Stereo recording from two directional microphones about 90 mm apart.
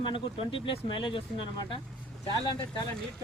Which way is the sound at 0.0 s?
70° left (ahead or behind).